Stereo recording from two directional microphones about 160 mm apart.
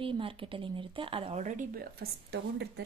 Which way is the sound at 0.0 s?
35° right (ahead or behind).